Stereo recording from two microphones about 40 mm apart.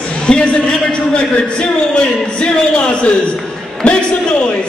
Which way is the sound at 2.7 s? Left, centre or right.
Left.